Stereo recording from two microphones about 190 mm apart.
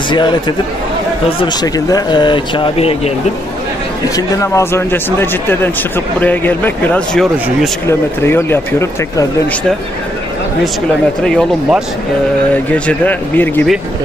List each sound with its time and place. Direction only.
0.1 s speech: 25° left (ahead or behind)
4.4 s a man's voice: 15° left (ahead or behind)
11.2 s a man's voice: 5° left (ahead or behind)